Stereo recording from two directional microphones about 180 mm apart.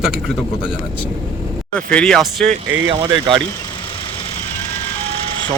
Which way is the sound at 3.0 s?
30° right (ahead or behind).